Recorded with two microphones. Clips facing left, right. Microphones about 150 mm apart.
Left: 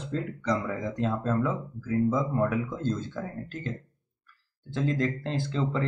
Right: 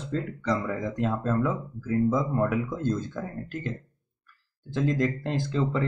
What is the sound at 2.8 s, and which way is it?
Speech, 15° right (ahead or behind).